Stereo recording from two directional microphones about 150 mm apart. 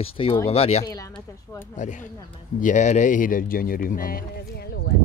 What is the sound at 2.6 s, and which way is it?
Speech, 55° left (ahead or behind).